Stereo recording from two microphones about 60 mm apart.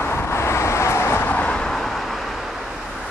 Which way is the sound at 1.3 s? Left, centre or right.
Left.